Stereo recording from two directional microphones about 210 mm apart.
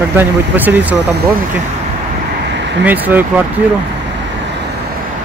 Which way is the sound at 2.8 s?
10° right (ahead or behind).